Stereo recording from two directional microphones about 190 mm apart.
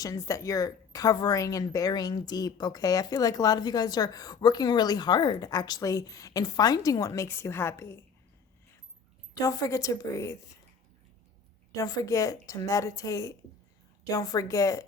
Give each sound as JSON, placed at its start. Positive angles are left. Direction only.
{"t": 0.0, "sound": "speech", "side_deg": 15}
{"t": 9.3, "sound": "a woman's voice", "side_deg": 20}
{"t": 11.7, "sound": "a woman's voice", "side_deg": 20}